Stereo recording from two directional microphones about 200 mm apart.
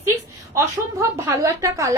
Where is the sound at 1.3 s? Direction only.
15° right (ahead or behind).